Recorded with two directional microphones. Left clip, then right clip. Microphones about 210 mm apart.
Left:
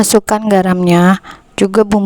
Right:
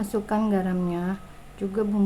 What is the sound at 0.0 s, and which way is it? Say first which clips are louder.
Speech: left 15 dB; 55° left (ahead or behind).